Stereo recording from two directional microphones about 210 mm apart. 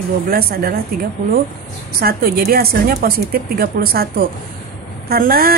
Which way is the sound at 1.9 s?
45° right (ahead or behind).